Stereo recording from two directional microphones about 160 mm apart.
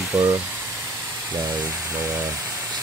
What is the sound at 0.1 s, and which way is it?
Steam, 20° right (ahead or behind).